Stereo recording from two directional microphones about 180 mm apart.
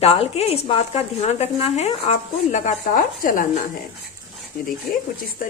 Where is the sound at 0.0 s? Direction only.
35° left (ahead or behind).